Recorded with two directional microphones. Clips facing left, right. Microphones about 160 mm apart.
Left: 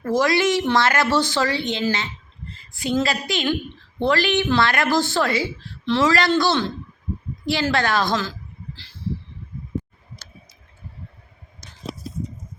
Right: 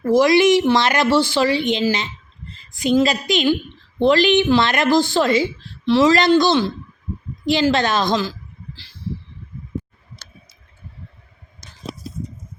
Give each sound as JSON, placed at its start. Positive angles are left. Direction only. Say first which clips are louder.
{"t": 0.0, "sound": "a woman's voice", "louder": "right 6 dB", "side_deg": -15}